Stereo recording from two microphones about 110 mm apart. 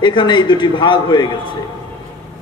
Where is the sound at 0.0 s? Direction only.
45° left (ahead or behind).